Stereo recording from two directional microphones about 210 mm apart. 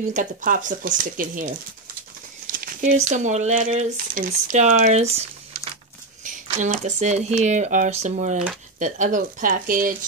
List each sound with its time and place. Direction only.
0.1 s speech: 35° right (ahead or behind)
2.5 s speech: 40° right (ahead or behind)